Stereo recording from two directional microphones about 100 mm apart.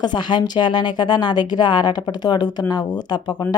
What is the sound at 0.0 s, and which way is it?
Speech, 50° left (ahead or behind).